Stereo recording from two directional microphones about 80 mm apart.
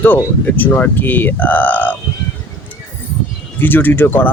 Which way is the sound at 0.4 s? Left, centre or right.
Left.